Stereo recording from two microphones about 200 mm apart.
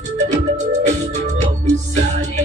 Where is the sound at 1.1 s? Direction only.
35° right (ahead or behind).